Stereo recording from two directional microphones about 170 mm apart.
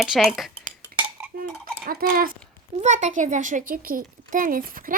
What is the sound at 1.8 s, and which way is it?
Speech, 60° right (ahead or behind).